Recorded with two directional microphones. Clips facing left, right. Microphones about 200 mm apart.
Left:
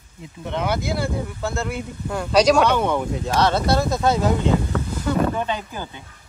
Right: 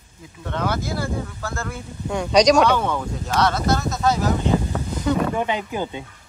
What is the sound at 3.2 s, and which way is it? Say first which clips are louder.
Speech: even; 30° left (ahead or behind).